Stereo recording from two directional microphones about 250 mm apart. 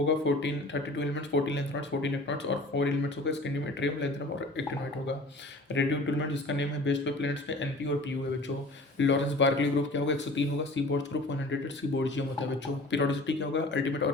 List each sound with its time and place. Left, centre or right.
0.3 s speech: left
5.7 s speech: left
9.0 s speech: left